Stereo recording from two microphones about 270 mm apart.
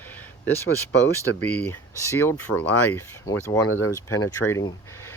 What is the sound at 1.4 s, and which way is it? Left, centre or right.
Speech, centre.